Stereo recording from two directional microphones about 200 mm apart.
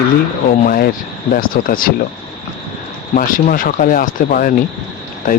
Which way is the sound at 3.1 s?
45° left (ahead or behind).